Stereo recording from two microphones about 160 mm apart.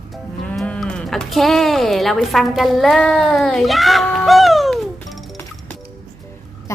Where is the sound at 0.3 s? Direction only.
5° left (ahead or behind).